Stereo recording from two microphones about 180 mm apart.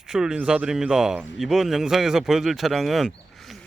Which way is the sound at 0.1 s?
5° right (ahead or behind).